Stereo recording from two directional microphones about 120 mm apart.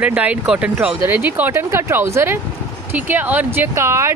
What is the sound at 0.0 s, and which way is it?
Speech, 10° right (ahead or behind).